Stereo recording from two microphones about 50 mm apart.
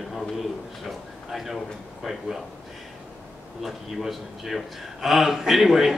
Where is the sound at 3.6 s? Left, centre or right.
Centre.